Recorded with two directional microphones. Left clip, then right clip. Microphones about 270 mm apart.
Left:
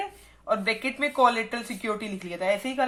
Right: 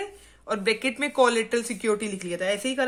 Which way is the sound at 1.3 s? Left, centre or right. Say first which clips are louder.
Right 3 dB; right.